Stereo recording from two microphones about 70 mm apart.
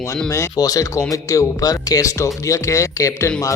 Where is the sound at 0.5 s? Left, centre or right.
Left.